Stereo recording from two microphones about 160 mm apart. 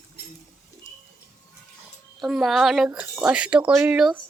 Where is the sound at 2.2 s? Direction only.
Centre (ahead or behind).